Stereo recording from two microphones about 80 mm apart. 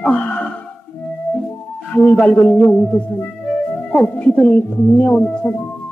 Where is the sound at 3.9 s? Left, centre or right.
Centre.